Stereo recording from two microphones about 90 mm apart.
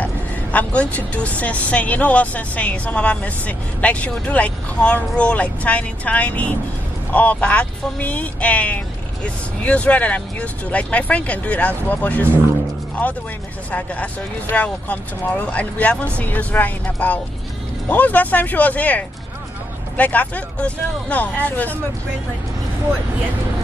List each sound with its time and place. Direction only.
0.0 s a woman's voice: 15° left (ahead or behind)
13.7 s a woman's voice: 15° left (ahead or behind)